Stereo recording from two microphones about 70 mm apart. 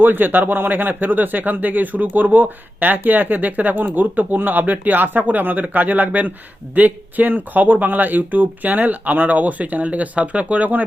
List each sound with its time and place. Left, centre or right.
0.0 s speech: right